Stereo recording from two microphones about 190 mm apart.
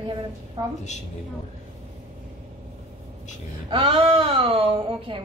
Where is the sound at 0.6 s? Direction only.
20° right (ahead or behind).